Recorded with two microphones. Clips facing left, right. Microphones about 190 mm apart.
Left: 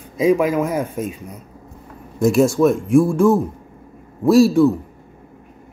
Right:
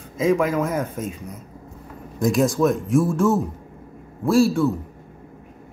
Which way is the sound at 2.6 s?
15° left (ahead or behind).